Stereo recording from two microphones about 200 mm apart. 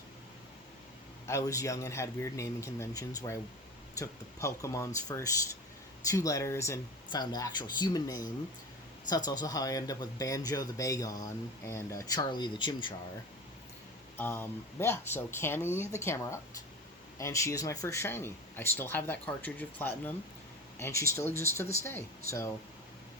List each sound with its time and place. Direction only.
1.3 s speech: 15° left (ahead or behind)
14.2 s speech: 10° left (ahead or behind)